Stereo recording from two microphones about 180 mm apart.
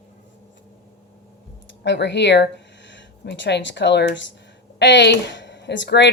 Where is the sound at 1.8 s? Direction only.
75° left (ahead or behind).